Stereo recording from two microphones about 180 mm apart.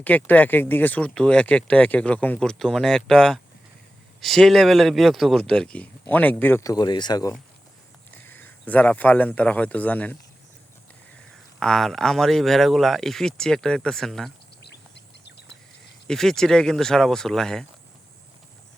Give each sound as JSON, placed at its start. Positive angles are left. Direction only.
{"t": 0.0, "sound": "speech", "side_deg": 10}
{"t": 8.3, "sound": "speech", "side_deg": 10}
{"t": 11.6, "sound": "speech", "side_deg": 0}
{"t": 14.6, "sound": "bird", "side_deg": 70}
{"t": 16.0, "sound": "speech", "side_deg": 0}